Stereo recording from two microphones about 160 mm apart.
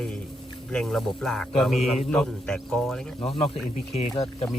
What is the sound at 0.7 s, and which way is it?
A man's voice, 5° left (ahead or behind).